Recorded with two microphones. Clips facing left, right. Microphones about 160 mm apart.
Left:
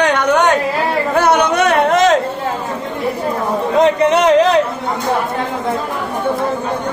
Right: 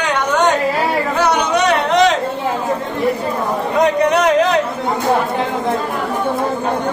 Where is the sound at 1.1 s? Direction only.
55° left (ahead or behind).